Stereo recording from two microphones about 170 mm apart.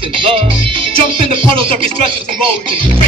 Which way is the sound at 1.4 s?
30° right (ahead or behind).